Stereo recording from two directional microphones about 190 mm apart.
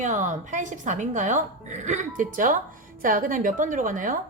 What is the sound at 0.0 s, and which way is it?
A woman's voice, 40° right (ahead or behind).